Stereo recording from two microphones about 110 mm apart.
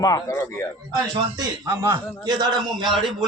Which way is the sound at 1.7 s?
20° right (ahead or behind).